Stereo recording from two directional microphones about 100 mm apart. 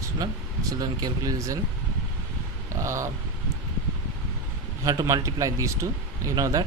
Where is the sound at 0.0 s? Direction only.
35° right (ahead or behind).